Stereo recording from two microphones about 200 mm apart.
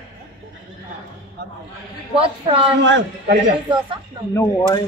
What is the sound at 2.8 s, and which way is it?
Speech, 60° right (ahead or behind).